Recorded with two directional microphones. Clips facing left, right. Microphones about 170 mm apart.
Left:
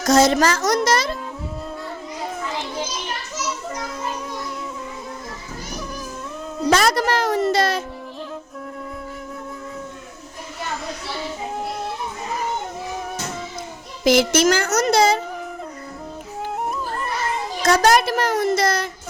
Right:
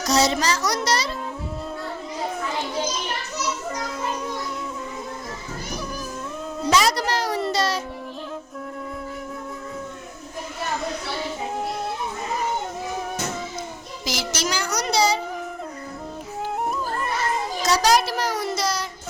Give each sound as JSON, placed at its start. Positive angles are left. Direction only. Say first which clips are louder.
{"t": 0.0, "sound": "a child's voice", "louder": "left 5 dB", "side_deg": 50}
{"t": 6.7, "sound": "music", "louder": "left 3 dB", "side_deg": 55}
{"t": 14.0, "sound": "a child's voice", "louder": "left 12 dB", "side_deg": 55}
{"t": 17.6, "sound": "a child's voice", "louder": "left 4 dB", "side_deg": 50}